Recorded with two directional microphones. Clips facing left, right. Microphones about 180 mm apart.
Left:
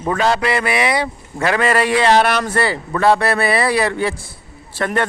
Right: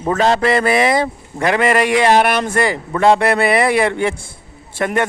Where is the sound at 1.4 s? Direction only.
20° right (ahead or behind).